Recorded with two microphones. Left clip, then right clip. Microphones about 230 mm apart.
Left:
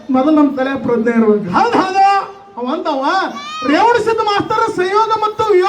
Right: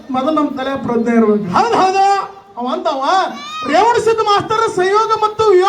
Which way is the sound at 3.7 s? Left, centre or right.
Right.